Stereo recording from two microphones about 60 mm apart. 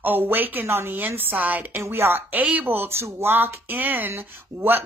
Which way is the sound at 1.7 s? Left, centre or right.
Right.